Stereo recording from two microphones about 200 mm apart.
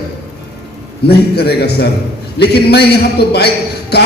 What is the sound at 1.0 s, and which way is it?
A man's voice, 55° left (ahead or behind).